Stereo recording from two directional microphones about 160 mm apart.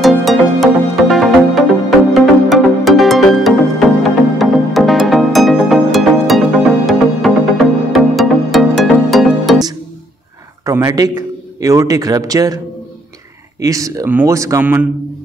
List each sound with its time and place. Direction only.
0.0 s music: centre (ahead or behind)
10.6 s a man's voice: 20° right (ahead or behind)
13.6 s speech: 20° right (ahead or behind)